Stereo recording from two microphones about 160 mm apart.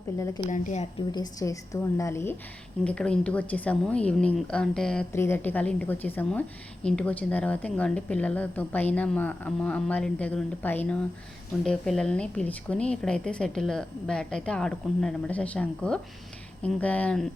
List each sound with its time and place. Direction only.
0.2 s a woman's voice: 20° left (ahead or behind)
0.4 s speech: 55° left (ahead or behind)
0.9 s a woman's voice: 25° left (ahead or behind)
2.8 s a woman's voice: 5° left (ahead or behind)
5.1 s a woman's voice: 15° left (ahead or behind)